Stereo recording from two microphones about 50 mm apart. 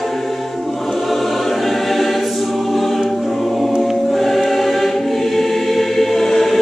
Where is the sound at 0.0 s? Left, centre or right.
Centre.